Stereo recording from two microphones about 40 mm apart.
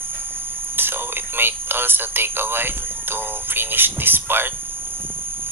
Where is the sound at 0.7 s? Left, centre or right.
Right.